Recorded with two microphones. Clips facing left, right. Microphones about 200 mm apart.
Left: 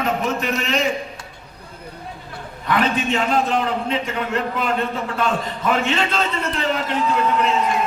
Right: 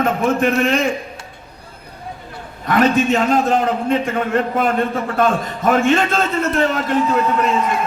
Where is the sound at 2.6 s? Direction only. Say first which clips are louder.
Right 6 dB; 45° right (ahead or behind).